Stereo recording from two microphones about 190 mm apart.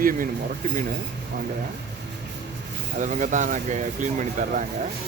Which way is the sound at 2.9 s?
40° right (ahead or behind).